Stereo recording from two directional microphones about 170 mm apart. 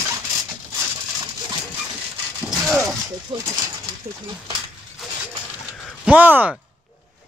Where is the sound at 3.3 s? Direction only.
30° right (ahead or behind).